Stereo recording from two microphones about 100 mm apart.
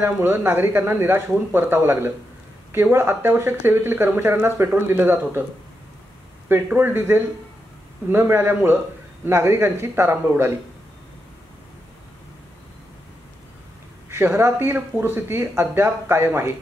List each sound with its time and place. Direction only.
0.0 s speech: 20° right (ahead or behind)
6.5 s speech: 20° right (ahead or behind)
14.1 s speech: 25° right (ahead or behind)